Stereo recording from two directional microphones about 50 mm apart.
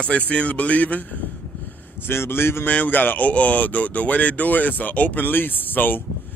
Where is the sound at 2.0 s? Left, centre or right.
Left.